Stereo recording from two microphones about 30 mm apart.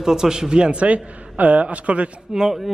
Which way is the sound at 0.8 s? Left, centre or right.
Right.